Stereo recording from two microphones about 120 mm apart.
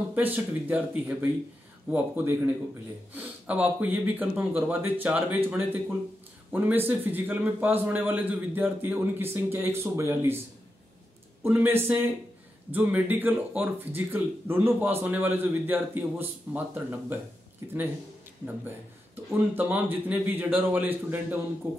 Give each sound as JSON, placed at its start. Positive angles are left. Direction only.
{"t": 0.1, "sound": "speech", "side_deg": -15}
{"t": 11.4, "sound": "speech", "side_deg": -20}
{"t": 19.3, "sound": "speech", "side_deg": -15}